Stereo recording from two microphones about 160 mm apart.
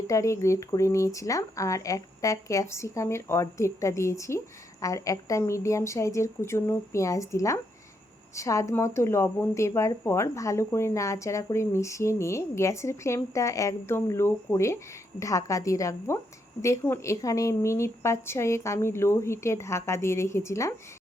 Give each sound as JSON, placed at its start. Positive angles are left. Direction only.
{"t": 0.1, "sound": "speech", "side_deg": 20}